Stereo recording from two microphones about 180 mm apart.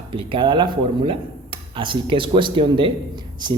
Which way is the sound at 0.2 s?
30° right (ahead or behind).